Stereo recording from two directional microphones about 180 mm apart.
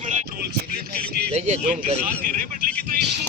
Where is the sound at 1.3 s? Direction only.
35° right (ahead or behind).